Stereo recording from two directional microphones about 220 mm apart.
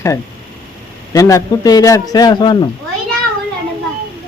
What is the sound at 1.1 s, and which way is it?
A man's voice, 15° left (ahead or behind).